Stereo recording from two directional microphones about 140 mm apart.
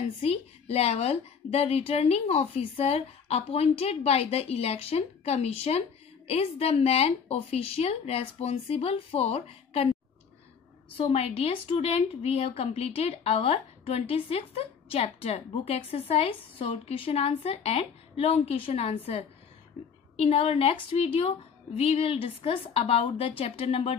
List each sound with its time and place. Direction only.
0.2 s a woman's voice: 45° left (ahead or behind)
11.1 s a woman's voice: 45° left (ahead or behind)